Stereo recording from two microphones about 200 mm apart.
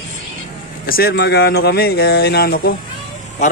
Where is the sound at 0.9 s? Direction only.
50° left (ahead or behind).